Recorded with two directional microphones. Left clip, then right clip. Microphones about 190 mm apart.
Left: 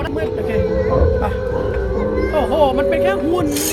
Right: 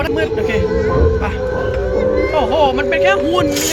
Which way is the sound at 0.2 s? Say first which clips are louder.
Right 3 dB; 5° right (ahead or behind).